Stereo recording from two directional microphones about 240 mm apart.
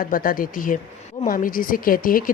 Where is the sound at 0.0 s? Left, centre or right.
Left.